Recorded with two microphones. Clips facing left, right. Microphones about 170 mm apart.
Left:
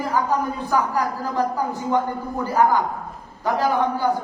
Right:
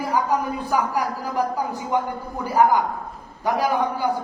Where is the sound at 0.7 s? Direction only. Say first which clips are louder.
Left 1 dB; 15° right (ahead or behind).